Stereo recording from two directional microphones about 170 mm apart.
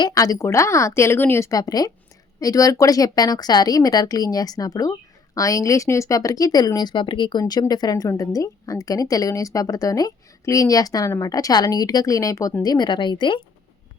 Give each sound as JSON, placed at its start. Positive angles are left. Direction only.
{"t": 0.0, "sound": "speech", "side_deg": 20}